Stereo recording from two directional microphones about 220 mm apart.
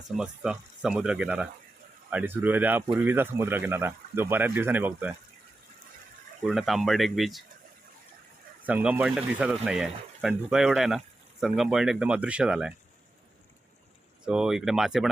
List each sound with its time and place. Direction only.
0.2 s speech: 5° right (ahead or behind)
6.4 s speech: centre (ahead or behind)
8.6 s speech: 5° right (ahead or behind)
14.3 s speech: 5° right (ahead or behind)